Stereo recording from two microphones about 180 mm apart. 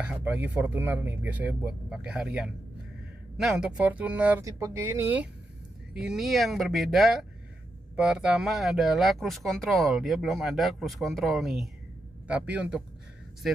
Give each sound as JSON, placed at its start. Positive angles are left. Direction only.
{"t": 0.0, "sound": "speech", "side_deg": -10}